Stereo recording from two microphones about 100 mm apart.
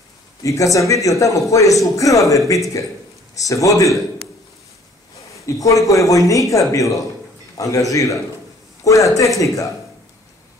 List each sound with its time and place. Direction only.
0.4 s a man's voice: 35° left (ahead or behind)
5.3 s a man's voice: 30° left (ahead or behind)